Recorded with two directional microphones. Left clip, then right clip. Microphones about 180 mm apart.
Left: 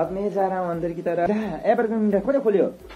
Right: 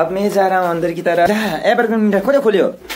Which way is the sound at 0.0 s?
15° right (ahead or behind).